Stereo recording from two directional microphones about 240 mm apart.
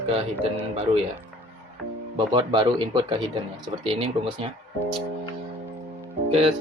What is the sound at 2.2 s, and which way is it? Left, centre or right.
Speech, centre.